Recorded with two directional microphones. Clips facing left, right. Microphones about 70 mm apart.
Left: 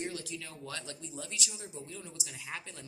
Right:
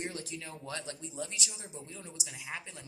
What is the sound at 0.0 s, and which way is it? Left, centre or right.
Speech, right.